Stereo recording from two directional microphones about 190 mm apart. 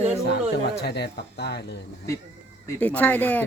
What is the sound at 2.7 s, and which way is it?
Speech, 10° left (ahead or behind).